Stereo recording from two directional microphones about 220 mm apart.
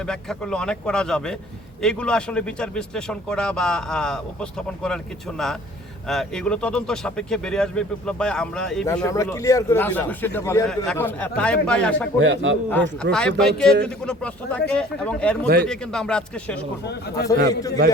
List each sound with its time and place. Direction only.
0.0 s speech: 5° left (ahead or behind)
6.1 s speech: centre (ahead or behind)
8.9 s speech: 15° left (ahead or behind)
12.2 s a man's voice: 55° right (ahead or behind)
13.0 s speech: 5° left (ahead or behind)
16.8 s speech: 50° left (ahead or behind)
17.5 s speech: 15° left (ahead or behind)